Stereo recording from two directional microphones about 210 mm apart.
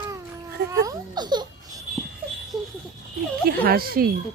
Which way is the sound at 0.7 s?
20° right (ahead or behind).